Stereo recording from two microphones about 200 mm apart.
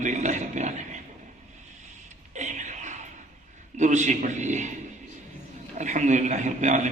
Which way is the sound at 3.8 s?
35° right (ahead or behind).